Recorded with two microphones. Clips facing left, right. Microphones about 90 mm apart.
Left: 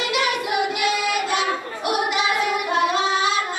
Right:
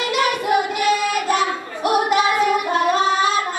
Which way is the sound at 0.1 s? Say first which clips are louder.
Right 6 dB; 40° right (ahead or behind).